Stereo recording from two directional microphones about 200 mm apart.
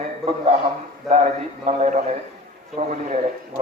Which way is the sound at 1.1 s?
35° right (ahead or behind).